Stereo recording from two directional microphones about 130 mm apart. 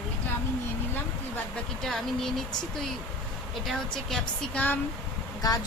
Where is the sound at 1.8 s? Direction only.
5° left (ahead or behind).